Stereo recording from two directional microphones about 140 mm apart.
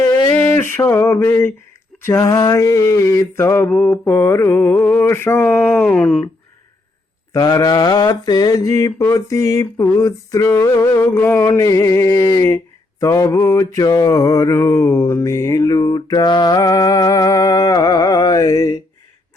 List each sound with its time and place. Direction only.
0.3 s a sound: 15° left (ahead or behind)
2.0 s mantra: 20° left (ahead or behind)
4.0 s mantra: 20° left (ahead or behind)
7.3 s mantra: 30° left (ahead or behind)